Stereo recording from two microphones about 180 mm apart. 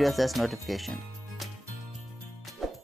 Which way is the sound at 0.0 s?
Centre (ahead or behind).